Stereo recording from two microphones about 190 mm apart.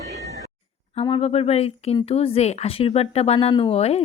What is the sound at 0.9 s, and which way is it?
Speech, 30° left (ahead or behind).